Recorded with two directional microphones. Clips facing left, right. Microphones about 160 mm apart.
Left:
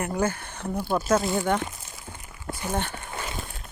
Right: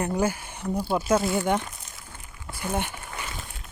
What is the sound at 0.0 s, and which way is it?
Speech, 10° right (ahead or behind).